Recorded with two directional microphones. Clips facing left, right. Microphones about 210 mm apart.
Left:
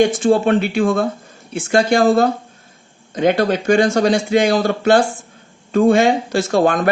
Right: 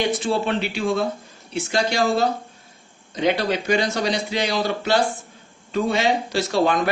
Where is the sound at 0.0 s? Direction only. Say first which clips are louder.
Left 8 dB; 50° left (ahead or behind).